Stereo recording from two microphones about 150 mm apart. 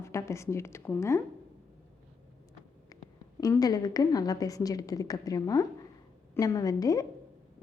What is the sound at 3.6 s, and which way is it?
A woman's voice, 25° left (ahead or behind).